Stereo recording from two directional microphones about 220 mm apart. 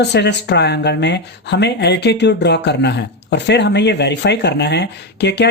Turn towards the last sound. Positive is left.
turn(degrees=50)  # may be behind; listen again after turning